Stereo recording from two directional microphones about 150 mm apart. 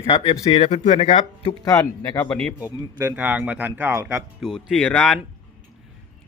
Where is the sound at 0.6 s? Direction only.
45° left (ahead or behind).